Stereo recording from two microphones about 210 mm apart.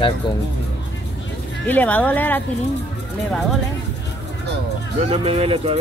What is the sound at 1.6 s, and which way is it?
Speech, 10° left (ahead or behind).